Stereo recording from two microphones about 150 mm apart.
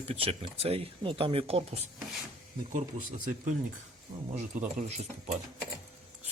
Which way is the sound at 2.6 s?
50° right (ahead or behind).